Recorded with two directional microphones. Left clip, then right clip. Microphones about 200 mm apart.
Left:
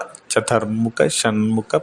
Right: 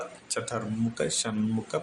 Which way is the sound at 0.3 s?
45° left (ahead or behind).